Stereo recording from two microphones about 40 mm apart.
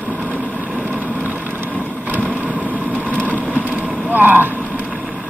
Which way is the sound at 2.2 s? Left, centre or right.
Right.